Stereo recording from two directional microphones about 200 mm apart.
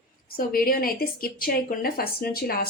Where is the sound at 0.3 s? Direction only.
45° left (ahead or behind).